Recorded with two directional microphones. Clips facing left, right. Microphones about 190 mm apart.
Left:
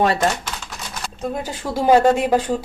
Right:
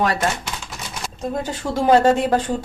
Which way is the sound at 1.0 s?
5° left (ahead or behind).